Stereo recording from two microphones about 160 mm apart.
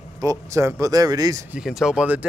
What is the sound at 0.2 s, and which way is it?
Speech, 20° right (ahead or behind).